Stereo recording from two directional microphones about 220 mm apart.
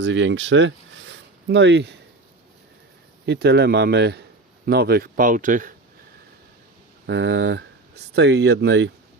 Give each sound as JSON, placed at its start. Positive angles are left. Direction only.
{"t": 0.0, "sound": "speech", "side_deg": -55}
{"t": 3.2, "sound": "speech", "side_deg": -50}
{"t": 7.1, "sound": "speech", "side_deg": -50}